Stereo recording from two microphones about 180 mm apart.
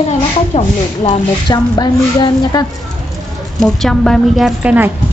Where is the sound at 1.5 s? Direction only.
20° left (ahead or behind).